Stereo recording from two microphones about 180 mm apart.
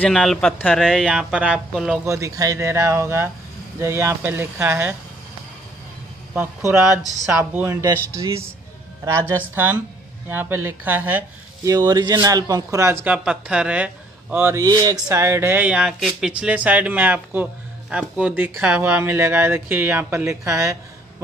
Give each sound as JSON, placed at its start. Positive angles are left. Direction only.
{"t": 0.0, "sound": "speech", "side_deg": 0}
{"t": 2.0, "sound": "speech", "side_deg": -15}
{"t": 6.3, "sound": "speech", "side_deg": -10}